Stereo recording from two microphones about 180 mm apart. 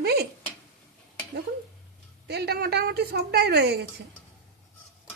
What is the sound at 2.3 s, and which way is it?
A woman's voice, 65° right (ahead or behind).